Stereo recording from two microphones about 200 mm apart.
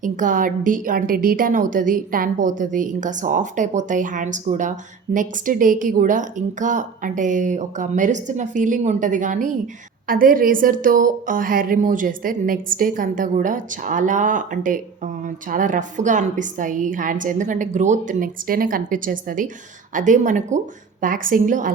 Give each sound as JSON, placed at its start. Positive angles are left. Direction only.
{"t": 0.0, "sound": "a woman's voice", "side_deg": -40}